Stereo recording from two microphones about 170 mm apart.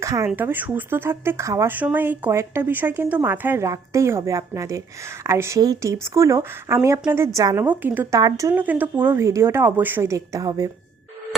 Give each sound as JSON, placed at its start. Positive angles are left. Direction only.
{"t": 0.0, "sound": "a woman's voice", "side_deg": -15}